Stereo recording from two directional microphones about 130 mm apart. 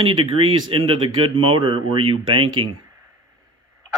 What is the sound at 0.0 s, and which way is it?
Speech, 45° right (ahead or behind).